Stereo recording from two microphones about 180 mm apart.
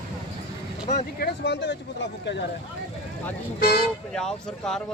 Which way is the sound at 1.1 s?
70° left (ahead or behind).